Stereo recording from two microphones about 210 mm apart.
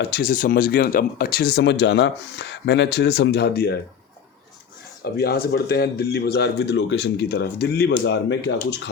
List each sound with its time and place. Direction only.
0.0 s speech: 50° left (ahead or behind)
5.0 s speech: 50° left (ahead or behind)